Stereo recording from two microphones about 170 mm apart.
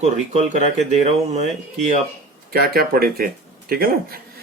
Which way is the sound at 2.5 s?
65° right (ahead or behind).